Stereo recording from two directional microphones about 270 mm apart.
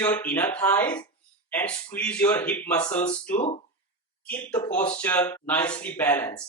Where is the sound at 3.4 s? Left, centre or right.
Left.